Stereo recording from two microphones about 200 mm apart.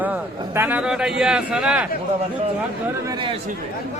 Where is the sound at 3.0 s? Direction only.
20° right (ahead or behind).